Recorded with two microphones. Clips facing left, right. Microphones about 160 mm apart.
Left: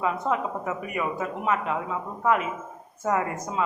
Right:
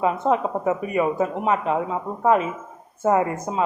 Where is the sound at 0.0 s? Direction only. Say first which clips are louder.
Right 5 dB; 25° right (ahead or behind).